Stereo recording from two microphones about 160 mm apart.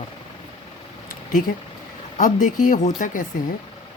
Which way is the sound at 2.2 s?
55° left (ahead or behind).